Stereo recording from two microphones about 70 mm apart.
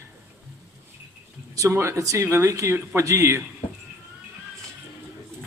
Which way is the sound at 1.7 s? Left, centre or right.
Right.